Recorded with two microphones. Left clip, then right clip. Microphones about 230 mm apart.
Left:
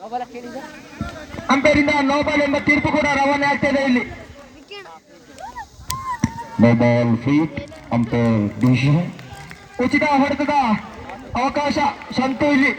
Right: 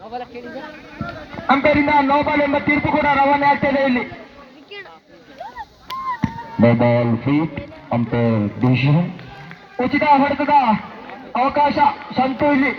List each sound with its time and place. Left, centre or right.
0.1 s speech: left
1.5 s speech: left
6.2 s speech: left